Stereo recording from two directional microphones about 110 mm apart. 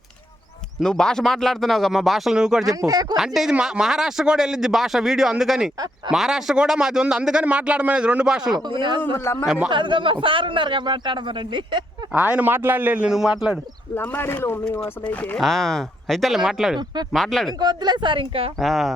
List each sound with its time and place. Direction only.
0.8 s speech: 5° left (ahead or behind)
2.6 s speech: 35° right (ahead or behind)
3.2 s a man's voice: 5° right (ahead or behind)
8.5 s a man's voice: 45° right (ahead or behind)
9.1 s speech: 25° left (ahead or behind)
9.6 s a man's voice: 45° right (ahead or behind)
12.1 s a man's voice: 15° right (ahead or behind)
13.1 s speech: 5° right (ahead or behind)
13.9 s speech: 15° left (ahead or behind)
15.4 s speech: centre (ahead or behind)
16.7 s speech: 40° right (ahead or behind)
17.1 s speech: 5° left (ahead or behind)
17.6 s a man's voice: 40° right (ahead or behind); by 18.5 s 55° right (ahead or behind)
18.6 s speech: centre (ahead or behind)